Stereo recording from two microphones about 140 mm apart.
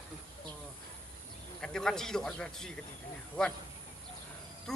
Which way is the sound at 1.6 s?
5° left (ahead or behind).